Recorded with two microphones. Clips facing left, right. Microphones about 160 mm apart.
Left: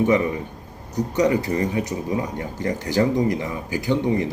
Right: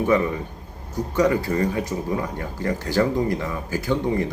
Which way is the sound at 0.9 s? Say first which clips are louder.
Left 1 dB; 20° left (ahead or behind).